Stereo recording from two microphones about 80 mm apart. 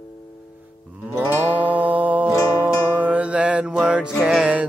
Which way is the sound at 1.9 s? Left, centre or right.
Centre.